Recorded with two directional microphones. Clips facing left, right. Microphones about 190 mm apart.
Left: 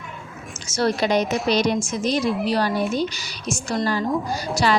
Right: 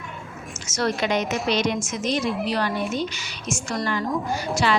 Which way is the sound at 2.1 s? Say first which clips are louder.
Left 3 dB; centre (ahead or behind).